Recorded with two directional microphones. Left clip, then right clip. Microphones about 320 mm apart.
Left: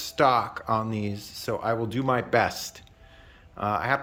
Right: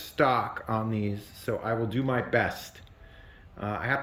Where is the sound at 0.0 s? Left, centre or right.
Centre.